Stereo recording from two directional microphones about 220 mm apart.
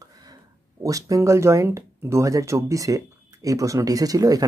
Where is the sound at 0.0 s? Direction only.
15° right (ahead or behind).